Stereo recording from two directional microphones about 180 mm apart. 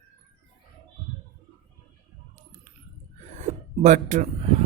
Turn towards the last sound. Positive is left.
turn(degrees=-35)  # may be behind; listen again after turning